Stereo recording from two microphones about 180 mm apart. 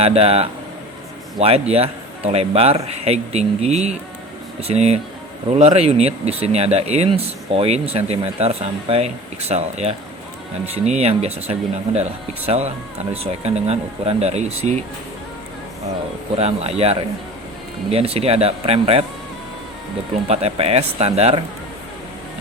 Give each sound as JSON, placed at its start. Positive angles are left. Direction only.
{"t": 0.0, "sound": "a man's voice", "side_deg": -35}
{"t": 16.4, "sound": "a man's voice", "side_deg": -35}
{"t": 20.2, "sound": "a man's voice", "side_deg": -35}